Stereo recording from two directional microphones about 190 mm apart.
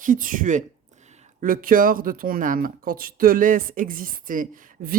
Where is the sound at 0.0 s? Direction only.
45° right (ahead or behind).